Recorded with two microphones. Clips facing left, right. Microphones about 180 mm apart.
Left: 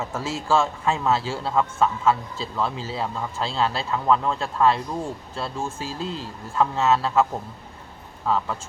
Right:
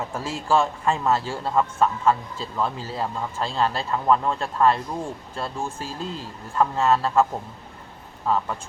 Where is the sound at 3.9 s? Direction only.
Centre (ahead or behind).